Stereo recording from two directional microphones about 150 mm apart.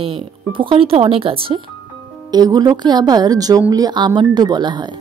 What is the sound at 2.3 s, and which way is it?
Speech, 25° right (ahead or behind).